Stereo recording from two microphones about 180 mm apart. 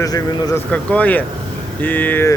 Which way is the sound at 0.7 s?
10° left (ahead or behind).